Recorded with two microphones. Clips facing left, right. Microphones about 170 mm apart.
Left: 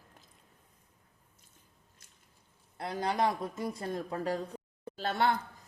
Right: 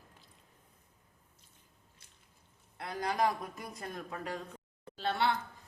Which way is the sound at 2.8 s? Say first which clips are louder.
Left 2 dB; 30° left (ahead or behind).